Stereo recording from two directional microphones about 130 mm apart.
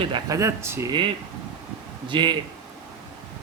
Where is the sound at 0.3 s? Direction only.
20° right (ahead or behind).